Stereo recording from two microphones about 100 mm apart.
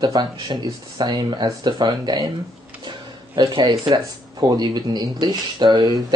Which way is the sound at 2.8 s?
50° right (ahead or behind).